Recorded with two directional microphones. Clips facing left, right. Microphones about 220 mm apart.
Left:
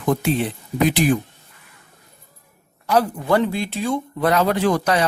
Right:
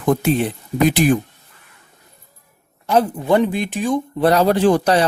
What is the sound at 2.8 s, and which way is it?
Speech, 20° right (ahead or behind).